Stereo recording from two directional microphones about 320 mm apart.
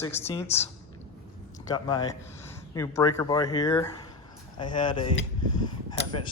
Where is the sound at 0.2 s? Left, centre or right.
Centre.